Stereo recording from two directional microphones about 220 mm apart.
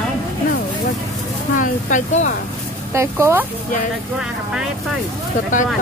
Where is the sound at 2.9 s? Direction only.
10° right (ahead or behind).